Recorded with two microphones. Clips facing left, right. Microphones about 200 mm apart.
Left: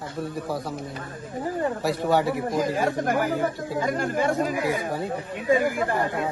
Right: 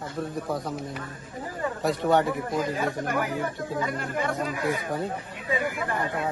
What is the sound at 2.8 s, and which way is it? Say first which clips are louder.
Speech: left 4 dB; 40° left (ahead or behind).